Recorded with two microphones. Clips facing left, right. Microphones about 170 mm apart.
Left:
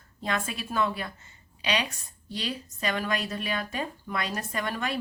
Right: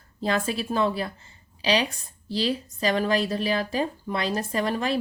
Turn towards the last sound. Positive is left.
turn(degrees=-30)  # may be behind; listen again after turning